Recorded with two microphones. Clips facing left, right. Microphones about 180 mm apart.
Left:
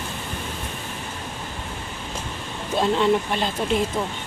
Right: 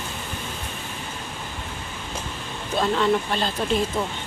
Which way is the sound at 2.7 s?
20° left (ahead or behind).